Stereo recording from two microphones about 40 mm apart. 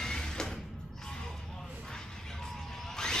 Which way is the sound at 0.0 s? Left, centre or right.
Centre.